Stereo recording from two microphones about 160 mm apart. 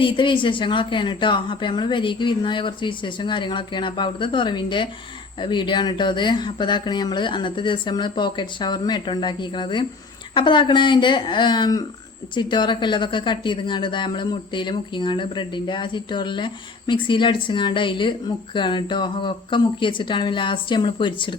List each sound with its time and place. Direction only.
0.0 s speech: 30° left (ahead or behind)